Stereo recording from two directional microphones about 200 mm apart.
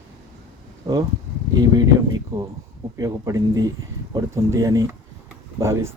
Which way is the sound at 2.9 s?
15° right (ahead or behind).